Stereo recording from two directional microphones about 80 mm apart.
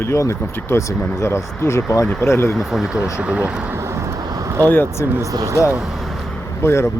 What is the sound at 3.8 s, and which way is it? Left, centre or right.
Vehicle, right.